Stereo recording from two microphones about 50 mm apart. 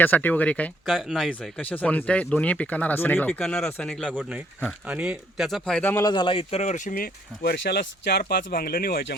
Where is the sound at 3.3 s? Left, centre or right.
Centre.